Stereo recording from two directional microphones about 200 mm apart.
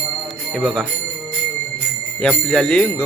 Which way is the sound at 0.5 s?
Centre (ahead or behind).